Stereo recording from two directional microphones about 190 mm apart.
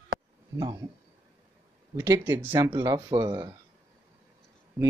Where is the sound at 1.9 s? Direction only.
15° right (ahead or behind).